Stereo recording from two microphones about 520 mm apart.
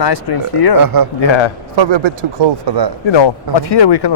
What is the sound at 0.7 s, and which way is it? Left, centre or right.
Speech, right.